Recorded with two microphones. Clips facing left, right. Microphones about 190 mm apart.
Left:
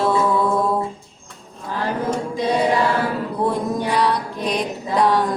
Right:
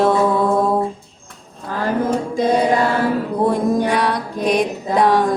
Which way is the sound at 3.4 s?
50° right (ahead or behind).